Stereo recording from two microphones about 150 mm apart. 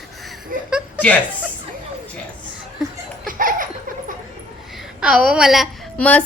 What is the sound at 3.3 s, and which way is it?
Laughter, 65° right (ahead or behind).